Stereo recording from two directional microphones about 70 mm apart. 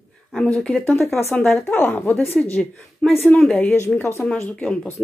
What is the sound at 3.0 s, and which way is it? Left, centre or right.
Speech, centre.